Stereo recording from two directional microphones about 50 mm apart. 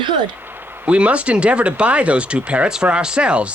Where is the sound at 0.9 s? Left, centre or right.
Right.